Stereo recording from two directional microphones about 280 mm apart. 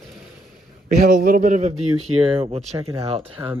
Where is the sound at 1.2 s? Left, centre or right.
Right.